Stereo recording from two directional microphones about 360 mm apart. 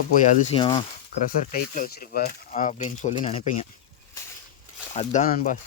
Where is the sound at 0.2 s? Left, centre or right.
Centre.